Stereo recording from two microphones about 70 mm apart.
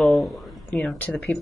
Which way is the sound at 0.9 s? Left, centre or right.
Left.